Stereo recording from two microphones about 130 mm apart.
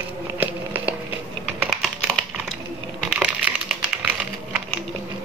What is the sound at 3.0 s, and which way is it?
Crushing, 10° right (ahead or behind).